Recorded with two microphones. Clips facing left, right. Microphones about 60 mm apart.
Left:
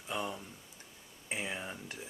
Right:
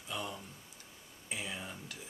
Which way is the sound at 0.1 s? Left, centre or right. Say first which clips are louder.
Left 3 dB; left.